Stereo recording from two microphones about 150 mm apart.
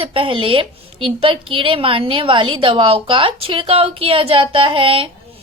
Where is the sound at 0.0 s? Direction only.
35° right (ahead or behind).